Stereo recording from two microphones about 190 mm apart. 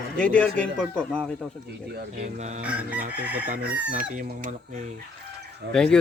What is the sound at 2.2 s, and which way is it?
Mantra, 35° right (ahead or behind).